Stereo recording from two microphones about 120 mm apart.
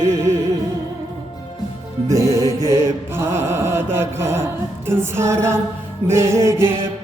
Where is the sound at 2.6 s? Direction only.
25° right (ahead or behind).